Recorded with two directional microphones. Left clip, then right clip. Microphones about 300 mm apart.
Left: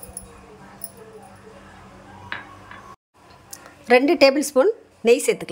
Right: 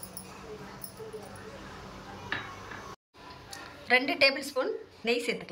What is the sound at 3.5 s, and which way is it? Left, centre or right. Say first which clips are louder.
Speech: left 9 dB; left.